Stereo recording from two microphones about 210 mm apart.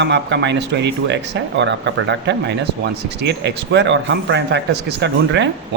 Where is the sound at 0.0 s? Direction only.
55° right (ahead or behind).